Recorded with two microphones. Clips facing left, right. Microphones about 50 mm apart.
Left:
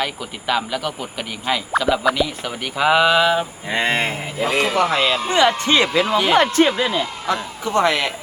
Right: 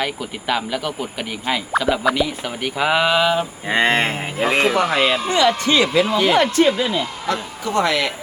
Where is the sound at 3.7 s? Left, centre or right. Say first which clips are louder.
Right 3 dB; right.